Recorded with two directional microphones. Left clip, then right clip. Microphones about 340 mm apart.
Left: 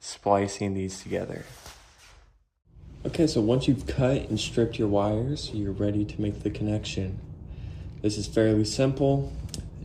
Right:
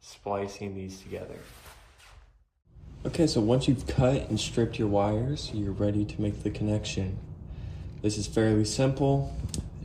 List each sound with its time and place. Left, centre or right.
0.0 s speech: left
3.0 s speech: centre